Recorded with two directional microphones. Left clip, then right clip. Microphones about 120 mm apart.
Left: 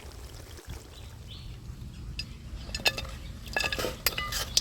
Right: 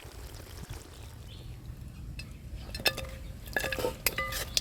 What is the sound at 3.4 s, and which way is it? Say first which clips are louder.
Stir: left 2 dB; 15° right (ahead or behind).